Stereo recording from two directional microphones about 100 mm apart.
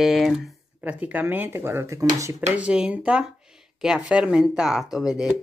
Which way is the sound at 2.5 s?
10° right (ahead or behind).